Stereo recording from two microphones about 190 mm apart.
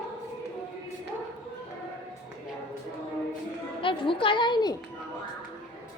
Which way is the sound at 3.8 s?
25° left (ahead or behind).